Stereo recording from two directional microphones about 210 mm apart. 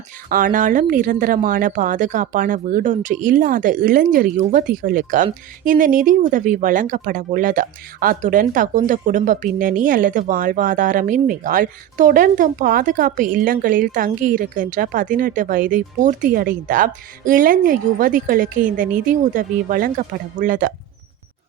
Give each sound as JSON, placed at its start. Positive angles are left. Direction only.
{"t": 0.3, "sound": "speech", "side_deg": -40}